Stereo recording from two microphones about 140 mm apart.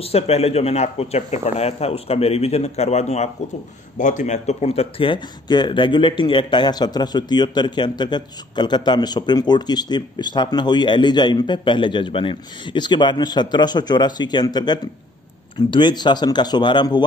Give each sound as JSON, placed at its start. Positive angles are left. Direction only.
{"t": 0.0, "sound": "speech", "side_deg": 45}
{"t": 4.0, "sound": "speech", "side_deg": 60}